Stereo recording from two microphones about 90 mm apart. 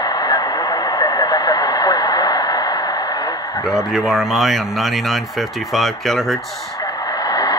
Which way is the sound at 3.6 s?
5° right (ahead or behind).